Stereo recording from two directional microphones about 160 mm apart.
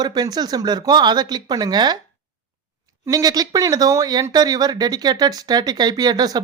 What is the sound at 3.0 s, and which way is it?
Speech, 20° right (ahead or behind).